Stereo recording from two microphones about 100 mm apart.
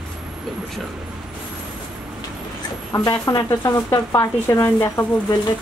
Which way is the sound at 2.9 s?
35° left (ahead or behind).